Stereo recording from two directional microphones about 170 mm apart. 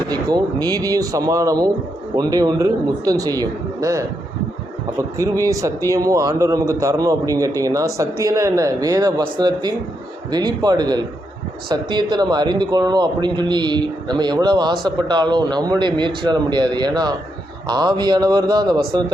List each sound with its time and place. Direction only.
0.1 s speech: 25° right (ahead or behind)